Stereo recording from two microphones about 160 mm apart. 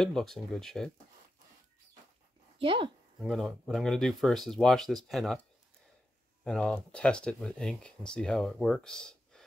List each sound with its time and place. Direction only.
0.0 s speech: centre (ahead or behind)
2.6 s speech: 35° right (ahead or behind)
3.2 s speech: centre (ahead or behind)